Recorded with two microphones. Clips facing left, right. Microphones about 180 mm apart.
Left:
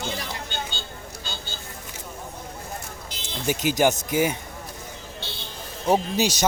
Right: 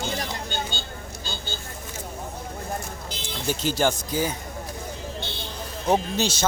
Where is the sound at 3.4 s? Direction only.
15° left (ahead or behind).